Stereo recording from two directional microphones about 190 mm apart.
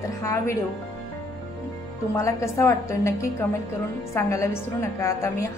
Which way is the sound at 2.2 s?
15° left (ahead or behind).